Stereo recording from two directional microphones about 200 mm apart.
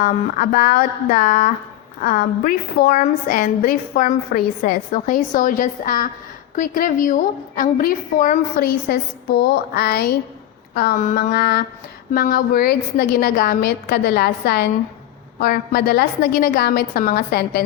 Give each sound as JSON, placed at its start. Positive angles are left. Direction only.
{"t": 0.0, "sound": "a woman's voice", "side_deg": 45}